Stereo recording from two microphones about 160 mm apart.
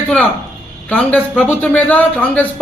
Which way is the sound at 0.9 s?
5° left (ahead or behind).